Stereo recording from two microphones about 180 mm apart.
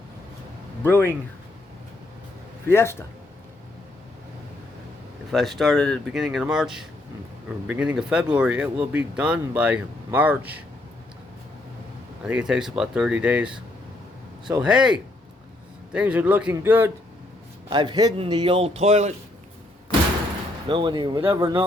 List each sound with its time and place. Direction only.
0.9 s a man's voice: 15° left (ahead or behind)
2.6 s a man's voice: 15° left (ahead or behind)
5.3 s speech: centre (ahead or behind)
12.2 s speech: 5° right (ahead or behind)
14.6 s speech: 5° right (ahead or behind)
17.7 s a man's voice: 25° right (ahead or behind)
20.7 s speech: 25° right (ahead or behind)